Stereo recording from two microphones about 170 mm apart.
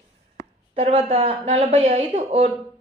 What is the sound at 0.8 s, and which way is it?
Speech, 35° right (ahead or behind).